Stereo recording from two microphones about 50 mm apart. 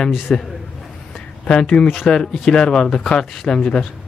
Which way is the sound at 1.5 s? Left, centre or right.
Centre.